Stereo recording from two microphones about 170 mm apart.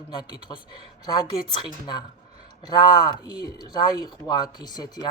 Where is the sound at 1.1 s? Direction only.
25° left (ahead or behind).